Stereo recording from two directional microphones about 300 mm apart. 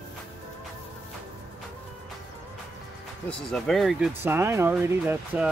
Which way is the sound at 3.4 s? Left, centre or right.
Centre.